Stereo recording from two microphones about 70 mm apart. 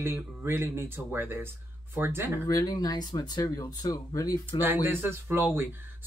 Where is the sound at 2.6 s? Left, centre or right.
Left.